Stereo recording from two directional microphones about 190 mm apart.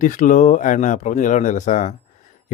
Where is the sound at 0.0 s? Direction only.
40° left (ahead or behind).